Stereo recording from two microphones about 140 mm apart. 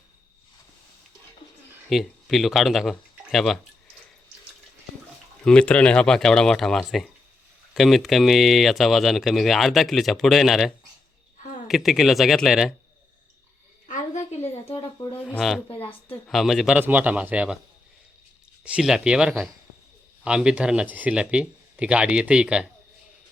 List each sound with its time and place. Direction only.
1.9 s speech: centre (ahead or behind)
5.5 s speech: 5° left (ahead or behind)
11.7 s speech: centre (ahead or behind)
13.8 s a sound: 55° left (ahead or behind)
15.4 s speech: centre (ahead or behind)
15.8 s a woman's voice: 40° left (ahead or behind)
16.2 s speech: centre (ahead or behind)
18.6 s speech: 5° right (ahead or behind)